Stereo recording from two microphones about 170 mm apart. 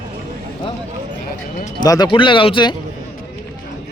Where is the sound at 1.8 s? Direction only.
25° left (ahead or behind).